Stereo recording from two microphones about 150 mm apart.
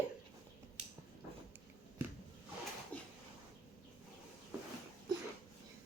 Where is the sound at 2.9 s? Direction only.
10° left (ahead or behind).